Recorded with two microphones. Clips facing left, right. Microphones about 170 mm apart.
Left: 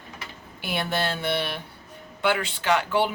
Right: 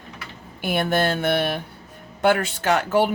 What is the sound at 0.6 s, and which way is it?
A woman's voice, 50° right (ahead or behind).